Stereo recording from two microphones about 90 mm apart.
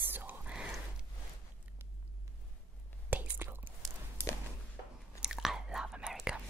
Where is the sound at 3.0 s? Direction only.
20° right (ahead or behind).